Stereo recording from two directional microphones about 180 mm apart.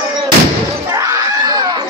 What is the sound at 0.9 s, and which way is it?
Screaming, 15° right (ahead or behind).